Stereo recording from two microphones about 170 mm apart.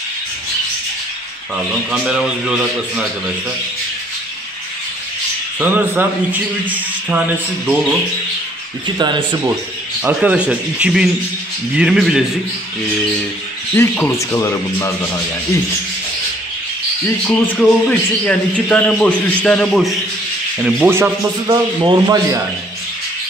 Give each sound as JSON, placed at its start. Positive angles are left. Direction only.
{"t": 1.9, "sound": "a man's voice", "side_deg": -5}
{"t": 5.6, "sound": "speech", "side_deg": -10}
{"t": 8.9, "sound": "speech", "side_deg": -25}
{"t": 10.0, "sound": "a man's voice", "side_deg": -10}
{"t": 13.7, "sound": "a man's voice", "side_deg": 10}
{"t": 17.6, "sound": "a man's voice", "side_deg": 5}
{"t": 20.6, "sound": "speech", "side_deg": -10}
{"t": 21.5, "sound": "speech", "side_deg": -25}